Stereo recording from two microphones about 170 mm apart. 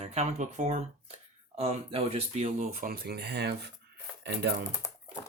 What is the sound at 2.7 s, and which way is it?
Speech, 60° right (ahead or behind).